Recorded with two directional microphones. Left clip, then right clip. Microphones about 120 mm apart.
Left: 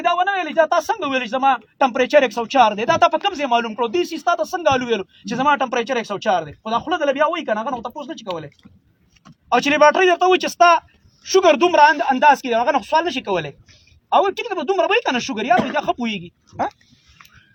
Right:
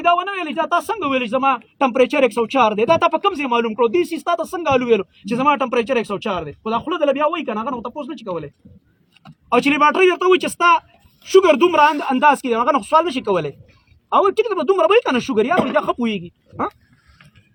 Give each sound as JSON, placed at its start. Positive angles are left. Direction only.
{"t": 0.0, "sound": "a man's voice", "side_deg": 20}
{"t": 9.5, "sound": "a man's voice", "side_deg": 20}